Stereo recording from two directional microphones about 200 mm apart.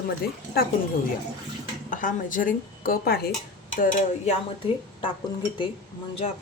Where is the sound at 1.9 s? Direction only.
40° left (ahead or behind).